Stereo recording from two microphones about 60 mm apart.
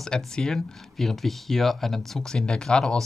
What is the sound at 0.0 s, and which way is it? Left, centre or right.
Speech, centre.